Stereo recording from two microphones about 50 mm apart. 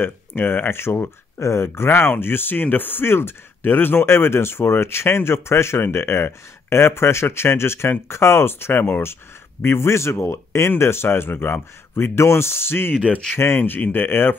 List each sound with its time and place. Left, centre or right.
0.0 s speech: left
10.8 s speech: left
13.6 s speech: left